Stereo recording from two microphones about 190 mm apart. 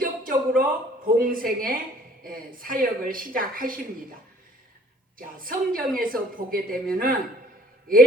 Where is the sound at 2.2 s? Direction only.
50° right (ahead or behind).